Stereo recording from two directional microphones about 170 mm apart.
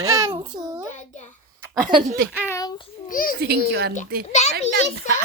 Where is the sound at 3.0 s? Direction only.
55° left (ahead or behind).